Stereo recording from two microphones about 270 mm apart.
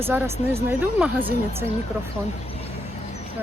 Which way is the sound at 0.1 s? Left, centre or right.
Centre.